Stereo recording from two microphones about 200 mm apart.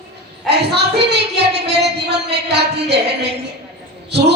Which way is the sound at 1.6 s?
55° right (ahead or behind).